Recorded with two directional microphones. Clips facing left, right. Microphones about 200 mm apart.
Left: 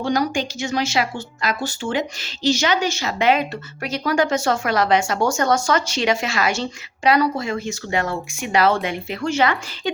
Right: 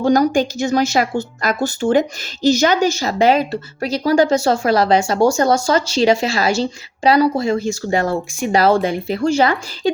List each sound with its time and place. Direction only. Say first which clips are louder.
0.0 s speech: right 7 dB; 45° right (ahead or behind)